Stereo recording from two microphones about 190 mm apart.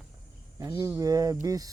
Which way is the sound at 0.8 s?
20° right (ahead or behind).